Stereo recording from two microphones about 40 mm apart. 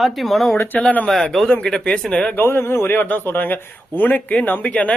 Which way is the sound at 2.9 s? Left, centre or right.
Left.